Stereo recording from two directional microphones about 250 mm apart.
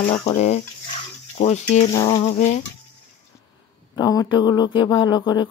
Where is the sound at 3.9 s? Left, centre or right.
Centre.